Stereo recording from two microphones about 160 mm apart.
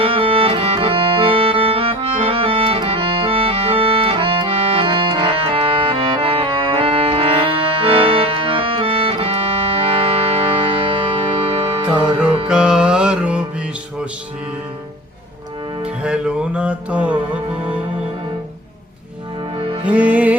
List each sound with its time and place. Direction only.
0.0 s music: 35° right (ahead or behind)
12.5 s music: 5° right (ahead or behind)
15.8 s music: 5° right (ahead or behind)
19.5 s music: 35° right (ahead or behind)
19.8 s music: 10° right (ahead or behind)